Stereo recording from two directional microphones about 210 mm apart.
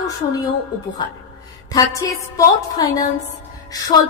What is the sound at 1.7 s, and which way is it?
A woman's voice, 15° left (ahead or behind).